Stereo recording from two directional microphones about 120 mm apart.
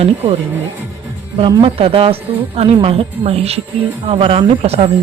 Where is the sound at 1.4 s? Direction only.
45° right (ahead or behind).